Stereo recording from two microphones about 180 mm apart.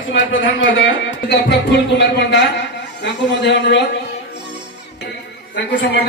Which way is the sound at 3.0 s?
75° left (ahead or behind).